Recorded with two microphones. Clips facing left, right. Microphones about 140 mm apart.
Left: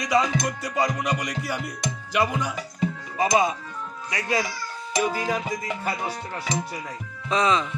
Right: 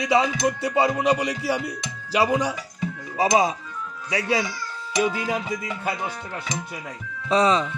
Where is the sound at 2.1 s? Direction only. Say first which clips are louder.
Right 4 dB; 35° right (ahead or behind).